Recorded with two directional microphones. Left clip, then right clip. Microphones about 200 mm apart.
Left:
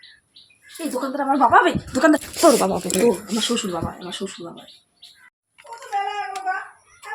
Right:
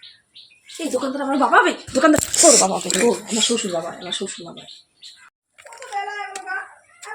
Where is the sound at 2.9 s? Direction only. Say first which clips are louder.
Left 1 dB; 35° left (ahead or behind).